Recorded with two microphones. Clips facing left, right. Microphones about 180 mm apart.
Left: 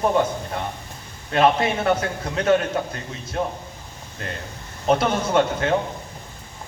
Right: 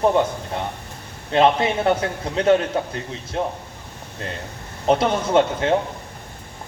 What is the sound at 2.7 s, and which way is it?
Speech, 25° right (ahead or behind).